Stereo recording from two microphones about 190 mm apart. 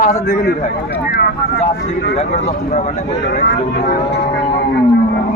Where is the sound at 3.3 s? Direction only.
50° left (ahead or behind).